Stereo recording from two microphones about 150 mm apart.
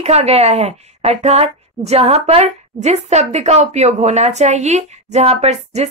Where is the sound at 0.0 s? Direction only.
45° right (ahead or behind).